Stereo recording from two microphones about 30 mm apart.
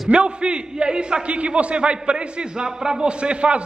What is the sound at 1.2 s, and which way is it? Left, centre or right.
A man's voice, right.